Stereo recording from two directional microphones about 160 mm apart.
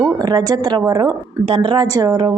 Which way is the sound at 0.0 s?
25° right (ahead or behind).